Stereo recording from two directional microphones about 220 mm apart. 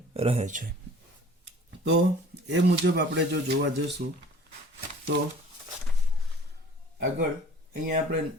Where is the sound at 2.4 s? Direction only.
50° right (ahead or behind).